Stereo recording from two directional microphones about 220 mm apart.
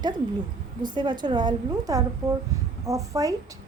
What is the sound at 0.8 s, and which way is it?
A woman's voice, 20° right (ahead or behind).